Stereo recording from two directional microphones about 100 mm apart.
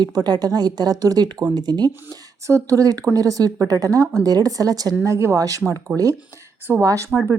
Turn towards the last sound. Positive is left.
turn(degrees=-25)  # may be behind; listen again after turning